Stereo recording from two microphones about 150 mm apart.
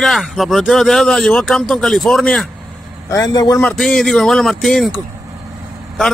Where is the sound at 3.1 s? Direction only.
25° left (ahead or behind).